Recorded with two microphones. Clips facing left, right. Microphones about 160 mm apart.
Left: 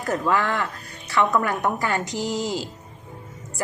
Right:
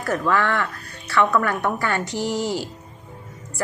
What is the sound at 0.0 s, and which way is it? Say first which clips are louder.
A woman's voice: right 1 dB; 20° left (ahead or behind).